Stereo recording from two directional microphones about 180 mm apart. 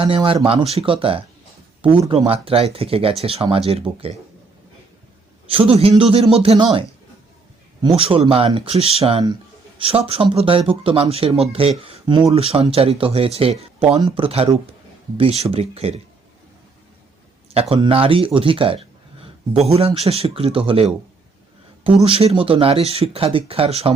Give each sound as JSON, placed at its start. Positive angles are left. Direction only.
{"t": 0.0, "sound": "speech", "side_deg": -30}
{"t": 5.5, "sound": "speech", "side_deg": -30}
{"t": 7.8, "sound": "speech", "side_deg": -30}
{"t": 17.5, "sound": "speech", "side_deg": -35}
{"t": 22.0, "sound": "speech", "side_deg": -30}